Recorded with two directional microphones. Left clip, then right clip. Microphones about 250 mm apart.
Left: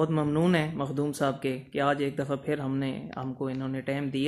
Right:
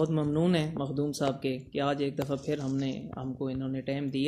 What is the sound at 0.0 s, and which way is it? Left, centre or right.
Speech, centre.